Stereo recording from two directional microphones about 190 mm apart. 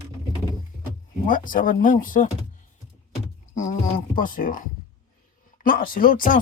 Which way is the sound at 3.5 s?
40° left (ahead or behind).